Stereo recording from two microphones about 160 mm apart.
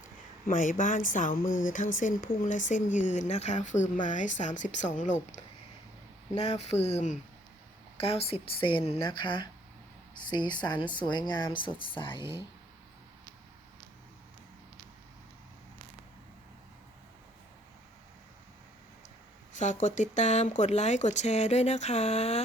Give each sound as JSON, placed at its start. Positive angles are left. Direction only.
{"t": 0.4, "sound": "speech", "side_deg": 55}
{"t": 6.3, "sound": "speech", "side_deg": 45}
{"t": 19.5, "sound": "speech", "side_deg": 50}